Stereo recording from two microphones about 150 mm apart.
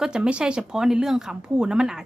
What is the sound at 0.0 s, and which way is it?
Speech, 5° right (ahead or behind).